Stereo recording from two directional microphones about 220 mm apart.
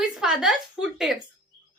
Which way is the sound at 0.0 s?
Centre (ahead or behind).